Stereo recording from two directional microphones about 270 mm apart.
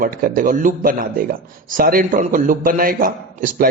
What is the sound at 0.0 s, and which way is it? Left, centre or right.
A man's voice, right.